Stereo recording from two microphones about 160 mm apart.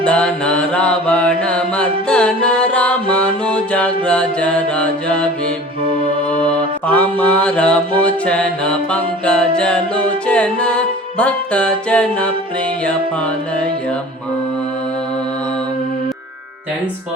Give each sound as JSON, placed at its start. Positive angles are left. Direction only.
{"t": 0.0, "sound": "mantra", "side_deg": 5}